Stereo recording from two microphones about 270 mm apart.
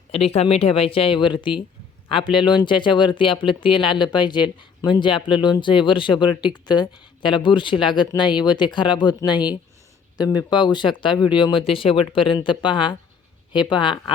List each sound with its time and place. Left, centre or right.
0.1 s speech: left